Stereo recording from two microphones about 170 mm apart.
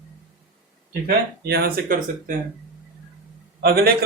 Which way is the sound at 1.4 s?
65° right (ahead or behind).